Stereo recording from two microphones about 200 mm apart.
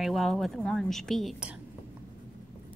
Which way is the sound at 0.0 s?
Centre (ahead or behind).